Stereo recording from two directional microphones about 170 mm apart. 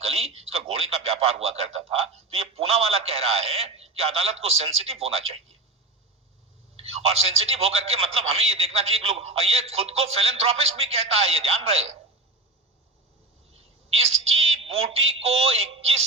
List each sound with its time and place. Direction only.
0.0 s speech: 35° right (ahead or behind)
6.7 s speech: 35° right (ahead or behind)
13.5 s a woman's voice: 35° right (ahead or behind)